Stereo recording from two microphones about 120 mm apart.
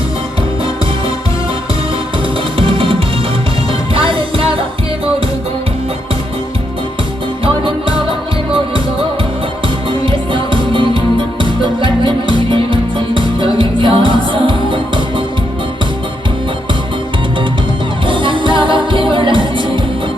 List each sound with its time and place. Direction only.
2.6 s music: 50° right (ahead or behind)
7.4 s music: 50° right (ahead or behind)
10.1 s music: 45° right (ahead or behind)
18.0 s music: 45° right (ahead or behind)